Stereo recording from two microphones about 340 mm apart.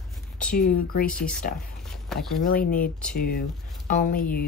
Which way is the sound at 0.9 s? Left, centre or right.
Left.